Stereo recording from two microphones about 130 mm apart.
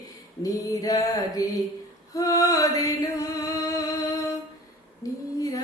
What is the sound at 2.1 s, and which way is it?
Singing, 25° left (ahead or behind).